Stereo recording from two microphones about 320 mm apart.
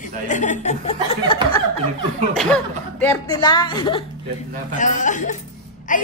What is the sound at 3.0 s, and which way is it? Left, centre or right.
A woman's voice, centre.